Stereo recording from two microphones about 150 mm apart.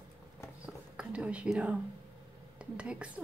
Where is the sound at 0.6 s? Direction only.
5° right (ahead or behind).